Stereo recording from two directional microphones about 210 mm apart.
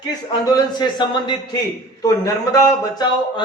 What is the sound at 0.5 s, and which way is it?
A man's voice, 20° left (ahead or behind).